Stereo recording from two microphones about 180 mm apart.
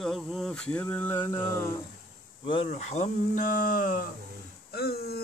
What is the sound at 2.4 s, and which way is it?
Speech, 30° left (ahead or behind).